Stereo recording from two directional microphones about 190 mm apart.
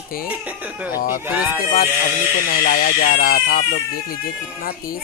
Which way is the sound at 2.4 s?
50° left (ahead or behind).